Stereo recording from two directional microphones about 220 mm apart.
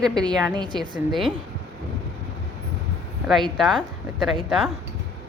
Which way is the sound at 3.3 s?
Centre (ahead or behind).